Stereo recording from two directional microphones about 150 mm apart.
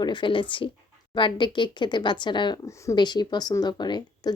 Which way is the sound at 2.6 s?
20° left (ahead or behind).